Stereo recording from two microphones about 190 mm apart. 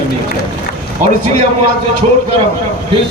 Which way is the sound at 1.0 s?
45° right (ahead or behind).